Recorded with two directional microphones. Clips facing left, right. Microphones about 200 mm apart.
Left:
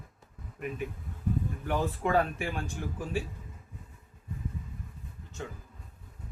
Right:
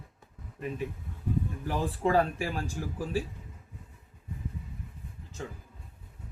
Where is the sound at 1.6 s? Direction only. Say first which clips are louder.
Right 1 dB; 35° right (ahead or behind).